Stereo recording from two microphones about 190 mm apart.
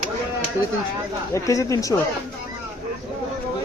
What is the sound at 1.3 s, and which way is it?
Speech, 15° left (ahead or behind).